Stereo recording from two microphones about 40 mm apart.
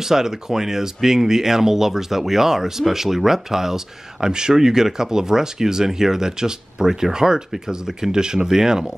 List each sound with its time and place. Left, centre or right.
0.0 s speech: centre